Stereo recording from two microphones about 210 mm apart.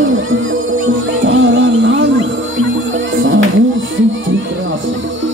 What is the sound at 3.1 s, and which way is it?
Music, 70° right (ahead or behind).